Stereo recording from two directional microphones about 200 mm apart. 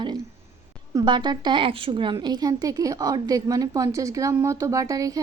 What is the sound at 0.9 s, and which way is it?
A woman's voice, 20° right (ahead or behind).